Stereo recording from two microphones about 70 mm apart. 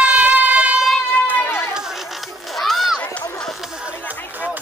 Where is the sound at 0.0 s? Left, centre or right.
Centre.